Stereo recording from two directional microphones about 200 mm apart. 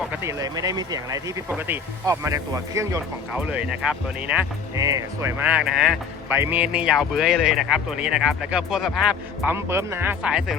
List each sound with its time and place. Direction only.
0.2 s speech: 15° right (ahead or behind)